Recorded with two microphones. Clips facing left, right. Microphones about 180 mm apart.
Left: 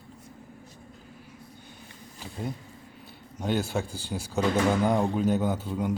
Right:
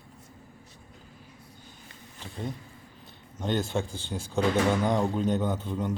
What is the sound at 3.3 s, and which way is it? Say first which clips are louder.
Speech: even; 10° left (ahead or behind).